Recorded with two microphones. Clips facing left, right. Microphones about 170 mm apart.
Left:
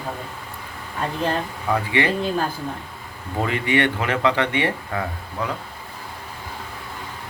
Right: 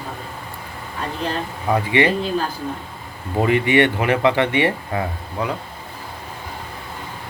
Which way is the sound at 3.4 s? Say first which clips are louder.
Right 5 dB; 15° right (ahead or behind).